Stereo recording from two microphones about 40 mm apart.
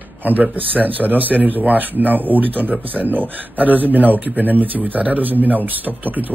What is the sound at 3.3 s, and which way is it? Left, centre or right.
Speech, right.